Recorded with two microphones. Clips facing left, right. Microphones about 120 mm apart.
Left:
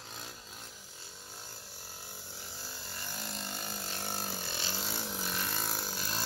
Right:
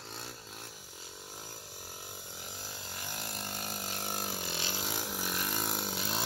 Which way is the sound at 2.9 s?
10° right (ahead or behind).